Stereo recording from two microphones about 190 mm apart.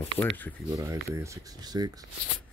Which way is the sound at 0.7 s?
15° right (ahead or behind).